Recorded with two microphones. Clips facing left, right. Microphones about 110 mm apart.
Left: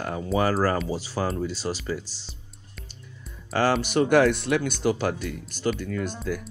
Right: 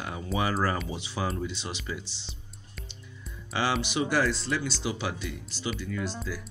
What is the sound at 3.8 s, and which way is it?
Speech, 50° left (ahead or behind).